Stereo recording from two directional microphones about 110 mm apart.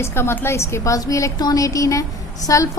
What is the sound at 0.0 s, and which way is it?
A woman's voice, 25° left (ahead or behind).